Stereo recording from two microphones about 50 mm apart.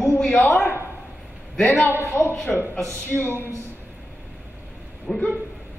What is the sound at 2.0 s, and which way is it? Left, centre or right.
A woman's voice, left.